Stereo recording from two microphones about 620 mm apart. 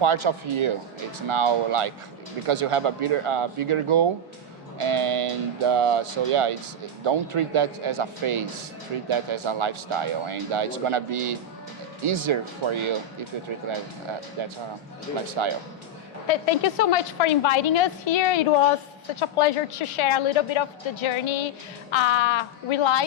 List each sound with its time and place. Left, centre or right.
0.0 s speech: right
14.4 s speech: right
16.3 s a woman's voice: left